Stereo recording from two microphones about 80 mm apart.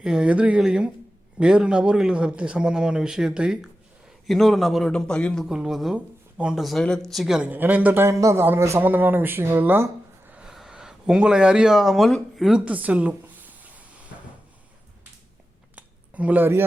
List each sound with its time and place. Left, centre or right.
0.0 s speech: centre
4.3 s speech: centre
4.9 s a man's voice: centre
5.5 s speech: centre
6.6 s speech: centre
7.5 s speech: right
8.0 s speech: right
8.8 s speech: right
10.3 s a sound: centre
12.4 s speech: centre
12.6 s a sound: centre
15.7 s a sound: centre